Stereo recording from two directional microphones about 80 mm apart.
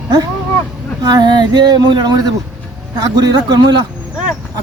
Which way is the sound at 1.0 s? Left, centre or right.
Right.